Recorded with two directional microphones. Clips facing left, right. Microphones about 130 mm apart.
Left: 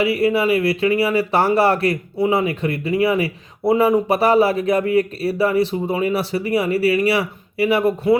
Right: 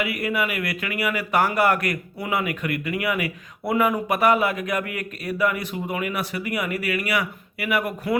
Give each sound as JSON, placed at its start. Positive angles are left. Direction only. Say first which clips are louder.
{"t": 0.0, "sound": "speech", "louder": "left 8 dB", "side_deg": 30}